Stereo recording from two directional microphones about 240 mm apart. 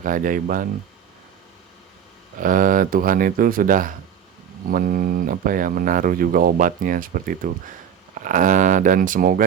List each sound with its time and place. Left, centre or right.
0.0 s speech: right
2.4 s speech: right